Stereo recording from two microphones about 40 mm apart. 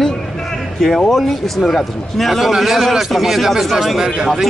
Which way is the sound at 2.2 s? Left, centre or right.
Centre.